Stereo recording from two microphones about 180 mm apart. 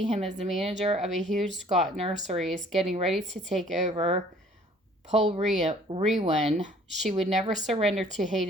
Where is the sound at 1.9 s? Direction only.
35° right (ahead or behind).